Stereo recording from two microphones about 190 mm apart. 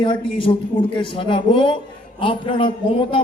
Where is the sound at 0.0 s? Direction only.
25° left (ahead or behind).